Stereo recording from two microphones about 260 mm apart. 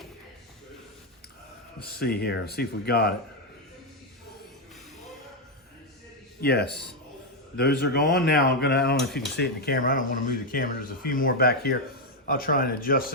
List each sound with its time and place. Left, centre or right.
1.8 s speech: left
6.4 s speech: left